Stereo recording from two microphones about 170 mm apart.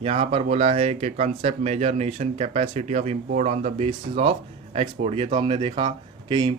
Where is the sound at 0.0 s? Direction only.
35° right (ahead or behind).